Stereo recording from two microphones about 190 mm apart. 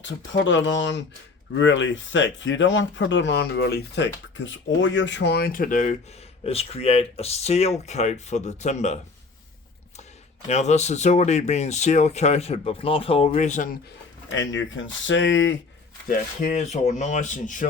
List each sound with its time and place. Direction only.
0.0 s speech: 75° left (ahead or behind); by 9.0 s 40° left (ahead or behind)
10.5 s speech: 35° left (ahead or behind)
14.3 s speech: 80° left
16.0 s speech: 40° left (ahead or behind)